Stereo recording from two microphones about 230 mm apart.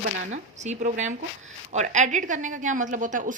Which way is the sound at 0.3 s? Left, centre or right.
Right.